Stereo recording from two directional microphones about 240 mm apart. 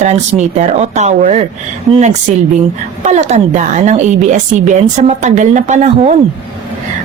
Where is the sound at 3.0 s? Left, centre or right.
Right.